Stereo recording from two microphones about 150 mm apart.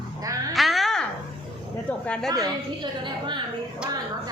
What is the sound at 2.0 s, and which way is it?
Speech, 5° left (ahead or behind).